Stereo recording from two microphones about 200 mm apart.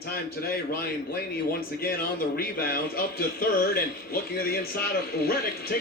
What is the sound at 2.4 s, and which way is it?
Speech, 50° left (ahead or behind).